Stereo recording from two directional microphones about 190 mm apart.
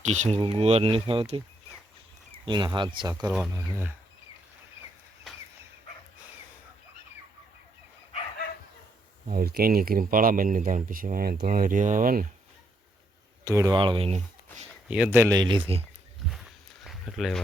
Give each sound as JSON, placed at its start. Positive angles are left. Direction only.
{"t": 0.1, "sound": "speech", "side_deg": -35}
{"t": 9.3, "sound": "speech", "side_deg": -50}
{"t": 13.4, "sound": "speech", "side_deg": -15}
{"t": 14.8, "sound": "speech", "side_deg": -5}
{"t": 16.3, "sound": "walk", "side_deg": 0}